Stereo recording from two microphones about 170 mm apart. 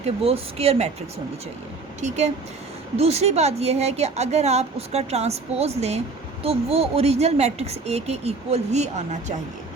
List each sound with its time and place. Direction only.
0.0 s a woman's voice: 35° right (ahead or behind)
2.0 s a woman's voice: 40° right (ahead or behind)